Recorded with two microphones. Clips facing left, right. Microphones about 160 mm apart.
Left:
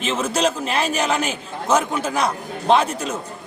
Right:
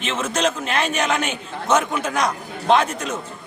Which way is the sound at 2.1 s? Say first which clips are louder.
Left 1 dB; 5° left (ahead or behind).